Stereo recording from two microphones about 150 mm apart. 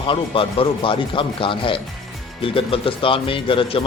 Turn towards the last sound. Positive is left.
turn(degrees=35)  # may be behind; listen again after turning